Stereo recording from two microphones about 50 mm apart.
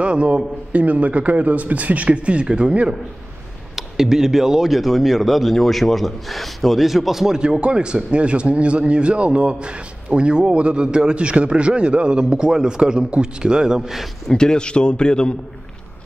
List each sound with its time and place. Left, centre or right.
0.0 s a man's voice: right
3.7 s a man's voice: centre
7.4 s a man's voice: centre
14.3 s a man's voice: centre